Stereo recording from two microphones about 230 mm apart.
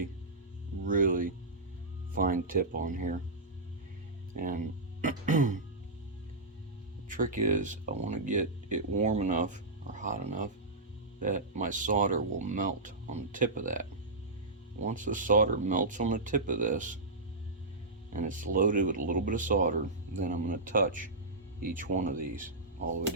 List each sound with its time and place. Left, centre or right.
0.9 s speech: right
4.4 s speech: right
7.1 s speech: right
14.8 s speech: right
18.1 s speech: right